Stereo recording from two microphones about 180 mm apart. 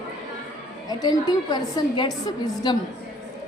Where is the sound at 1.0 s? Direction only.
25° left (ahead or behind).